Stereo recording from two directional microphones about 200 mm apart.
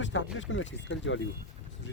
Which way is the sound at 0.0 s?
65° left (ahead or behind).